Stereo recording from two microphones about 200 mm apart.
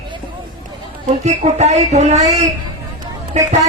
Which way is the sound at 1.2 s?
35° right (ahead or behind).